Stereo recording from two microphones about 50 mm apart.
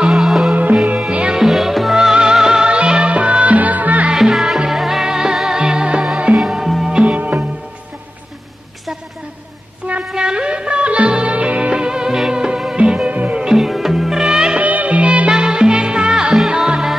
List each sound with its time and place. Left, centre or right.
0.0 s music: centre
0.8 s music: right
1.4 s music: centre; by 4.1 s right
4.1 s music: centre
6.3 s music: centre
7.2 s music: right
10.1 s music: centre
13.5 s music: centre
14.6 s music: right
15.3 s music: centre